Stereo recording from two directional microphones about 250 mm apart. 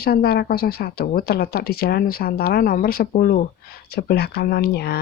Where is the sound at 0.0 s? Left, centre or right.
Left.